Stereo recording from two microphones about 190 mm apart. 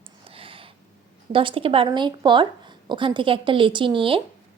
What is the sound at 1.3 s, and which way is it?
Speech, 30° right (ahead or behind).